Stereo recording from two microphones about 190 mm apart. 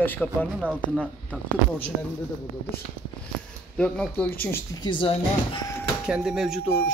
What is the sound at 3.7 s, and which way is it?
Speech, 5° left (ahead or behind).